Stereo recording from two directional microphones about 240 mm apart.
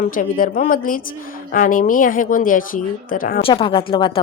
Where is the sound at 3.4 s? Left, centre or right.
Left.